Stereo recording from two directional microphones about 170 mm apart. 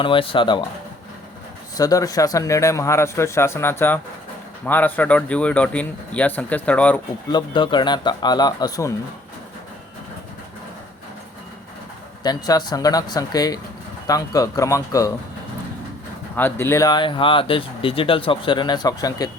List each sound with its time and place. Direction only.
0.0 s speech: 30° left (ahead or behind)
1.7 s speech: 20° left (ahead or behind)
7.3 s speech: 25° left (ahead or behind)
12.2 s speech: 25° left (ahead or behind)
16.3 s speech: 15° left (ahead or behind)